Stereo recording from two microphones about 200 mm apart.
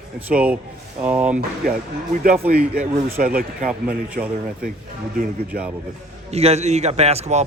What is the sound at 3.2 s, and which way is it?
Speech, 45° right (ahead or behind).